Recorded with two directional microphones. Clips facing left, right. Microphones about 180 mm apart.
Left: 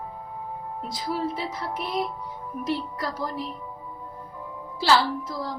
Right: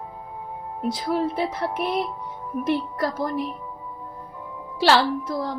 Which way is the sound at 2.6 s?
50° right (ahead or behind).